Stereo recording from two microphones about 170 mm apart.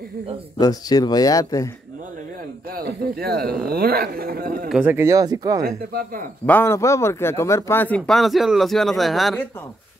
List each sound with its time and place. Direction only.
0.6 s speech: 20° left (ahead or behind)
2.7 s speech: 65° right (ahead or behind)
4.6 s speech: 10° right (ahead or behind)
5.9 s speech: 55° right (ahead or behind)
6.4 s speech: 10° left (ahead or behind)